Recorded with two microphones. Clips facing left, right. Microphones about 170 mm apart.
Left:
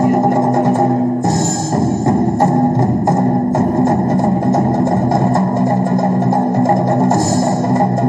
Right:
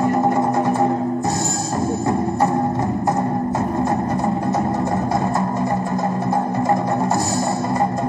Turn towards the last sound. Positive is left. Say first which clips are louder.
# left 6 dB
turn(degrees=45)  # may be behind; listen again after turning